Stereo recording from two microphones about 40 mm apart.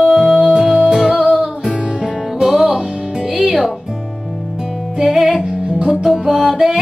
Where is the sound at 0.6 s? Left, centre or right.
Centre.